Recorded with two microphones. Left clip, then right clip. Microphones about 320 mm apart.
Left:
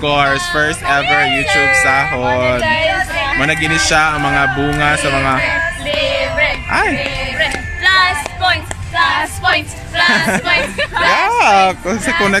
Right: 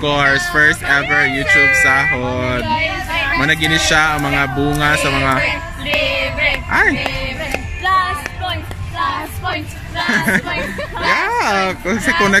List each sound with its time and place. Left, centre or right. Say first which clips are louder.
0.0 s speech: left 1 dB; centre
1.0 s speech: left 2 dB; left
1.7 s speech: even; centre
5.9 s music: right 3 dB; centre
6.7 s speech: right 4 dB; centre
7.8 s music: left 4 dB; left
10.1 s speech: left 1 dB; centre
10.4 s chatter: left 7 dB; left
11.1 s speech: left 4 dB; centre